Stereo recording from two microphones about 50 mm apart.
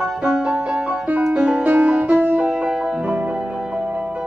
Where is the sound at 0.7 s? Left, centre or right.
Right.